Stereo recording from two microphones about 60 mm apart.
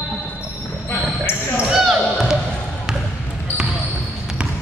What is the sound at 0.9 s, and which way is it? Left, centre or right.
Basketball bounce, left.